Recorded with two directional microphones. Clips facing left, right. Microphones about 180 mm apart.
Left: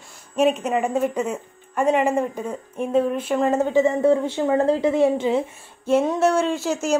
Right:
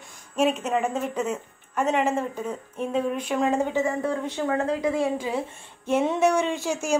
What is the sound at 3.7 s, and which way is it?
A woman's voice, 25° left (ahead or behind).